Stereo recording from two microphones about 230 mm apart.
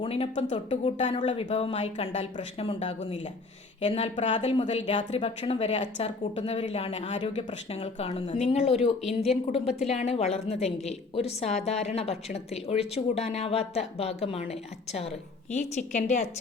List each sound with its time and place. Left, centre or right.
0.0 s a woman's voice: left
15.5 s a woman's voice: left